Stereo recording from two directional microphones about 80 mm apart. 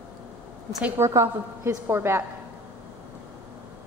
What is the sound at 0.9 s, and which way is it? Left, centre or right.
A woman's voice, right.